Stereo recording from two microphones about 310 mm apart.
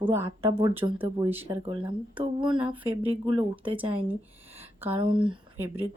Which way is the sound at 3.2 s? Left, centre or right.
Centre.